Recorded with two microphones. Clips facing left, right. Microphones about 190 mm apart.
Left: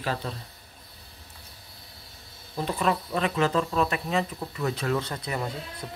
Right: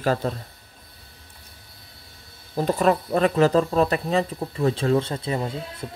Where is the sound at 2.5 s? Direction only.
45° right (ahead or behind).